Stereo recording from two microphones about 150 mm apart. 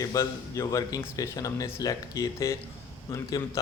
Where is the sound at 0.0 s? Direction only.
20° left (ahead or behind).